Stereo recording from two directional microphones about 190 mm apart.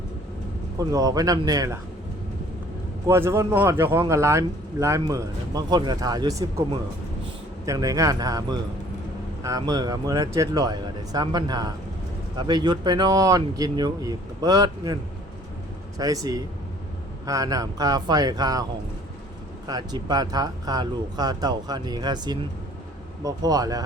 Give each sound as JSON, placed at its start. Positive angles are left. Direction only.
{"t": 0.8, "sound": "speech", "side_deg": -20}
{"t": 3.1, "sound": "speech", "side_deg": -15}
{"t": 16.0, "sound": "speech", "side_deg": -20}
{"t": 19.6, "sound": "speech", "side_deg": -20}